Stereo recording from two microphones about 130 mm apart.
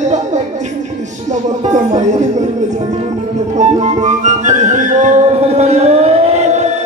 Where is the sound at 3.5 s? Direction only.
65° right (ahead or behind).